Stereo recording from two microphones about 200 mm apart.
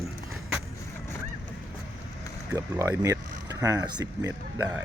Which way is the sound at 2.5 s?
15° right (ahead or behind).